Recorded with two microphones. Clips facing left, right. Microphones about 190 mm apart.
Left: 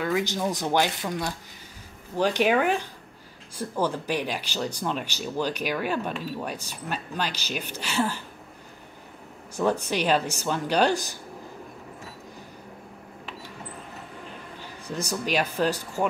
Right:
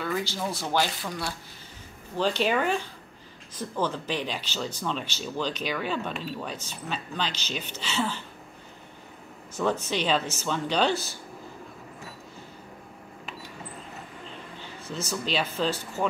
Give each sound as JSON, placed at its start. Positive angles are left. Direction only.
{"t": 0.0, "sound": "speech", "side_deg": 15}
{"t": 2.1, "sound": "speech", "side_deg": 15}
{"t": 9.6, "sound": "speech", "side_deg": 10}
{"t": 14.9, "sound": "speech", "side_deg": 15}